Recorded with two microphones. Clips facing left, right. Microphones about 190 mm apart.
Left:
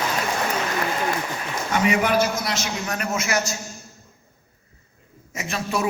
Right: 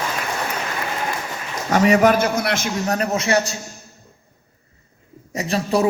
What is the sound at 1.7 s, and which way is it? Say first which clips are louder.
A man's voice: right 6 dB; 40° right (ahead or behind).